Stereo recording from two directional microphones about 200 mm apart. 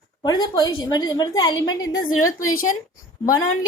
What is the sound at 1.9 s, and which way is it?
Speech, 90° left.